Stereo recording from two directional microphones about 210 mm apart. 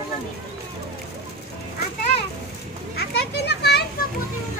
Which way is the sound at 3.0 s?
50° left (ahead or behind).